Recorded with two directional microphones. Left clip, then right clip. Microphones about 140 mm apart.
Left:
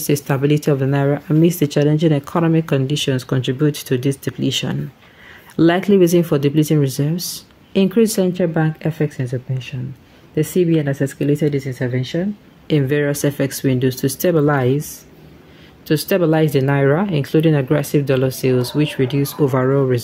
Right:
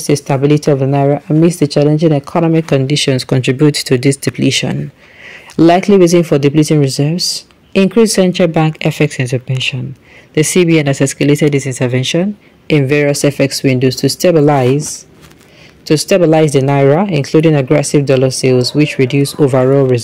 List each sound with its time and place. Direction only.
0.0 s speech: centre (ahead or behind); by 11.0 s 20° right (ahead or behind)
11.6 s speech: 85° right
12.6 s speech: 15° right (ahead or behind)
15.9 s speech: 15° right (ahead or behind)